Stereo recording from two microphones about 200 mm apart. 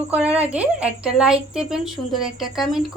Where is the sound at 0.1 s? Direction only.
5° right (ahead or behind).